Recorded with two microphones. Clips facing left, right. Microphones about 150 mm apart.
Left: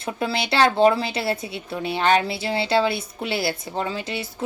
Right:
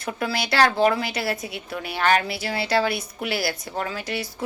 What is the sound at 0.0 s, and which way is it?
Speech, 25° left (ahead or behind).